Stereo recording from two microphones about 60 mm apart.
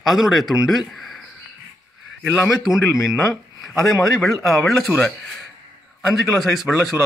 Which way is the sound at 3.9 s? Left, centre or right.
Centre.